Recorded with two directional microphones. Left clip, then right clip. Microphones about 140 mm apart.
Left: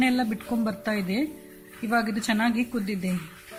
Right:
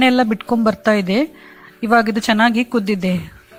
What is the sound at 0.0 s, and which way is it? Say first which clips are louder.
Speech: right 11 dB; 85° right.